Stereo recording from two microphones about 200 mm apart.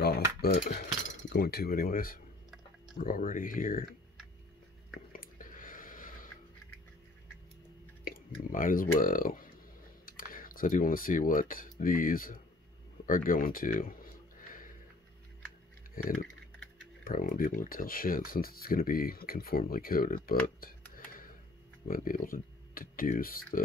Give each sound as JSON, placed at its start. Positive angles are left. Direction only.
{"t": 0.4, "sound": "speech", "side_deg": 45}
{"t": 5.1, "sound": "a sound", "side_deg": 45}
{"t": 8.0, "sound": "speech", "side_deg": 45}
{"t": 14.4, "sound": "music", "side_deg": 45}
{"t": 15.9, "sound": "typing", "side_deg": 45}
{"t": 17.0, "sound": "speech", "side_deg": 45}
{"t": 20.2, "sound": "a sound", "side_deg": 45}
{"t": 21.8, "sound": "speech", "side_deg": 45}